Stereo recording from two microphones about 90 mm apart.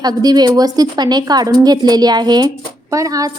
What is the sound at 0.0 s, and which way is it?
A woman's voice, 45° right (ahead or behind).